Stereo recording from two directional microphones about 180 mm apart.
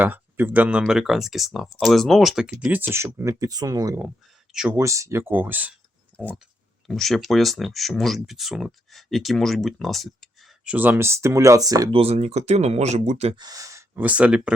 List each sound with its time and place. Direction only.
0.0 s speech: 10° right (ahead or behind)
4.5 s speech: 5° right (ahead or behind)
4.8 s speech: 15° right (ahead or behind)
6.1 s speech: 5° left (ahead or behind)
10.7 s speech: 10° right (ahead or behind)
11.9 s speech: 35° right (ahead or behind)
13.4 s speech: 20° right (ahead or behind)